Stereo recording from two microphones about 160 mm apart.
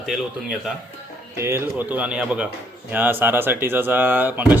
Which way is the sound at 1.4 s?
15° right (ahead or behind).